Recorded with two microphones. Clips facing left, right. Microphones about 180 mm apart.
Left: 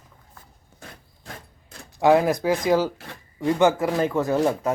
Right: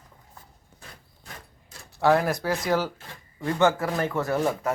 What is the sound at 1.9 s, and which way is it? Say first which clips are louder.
Speech: left 4 dB; 15° left (ahead or behind).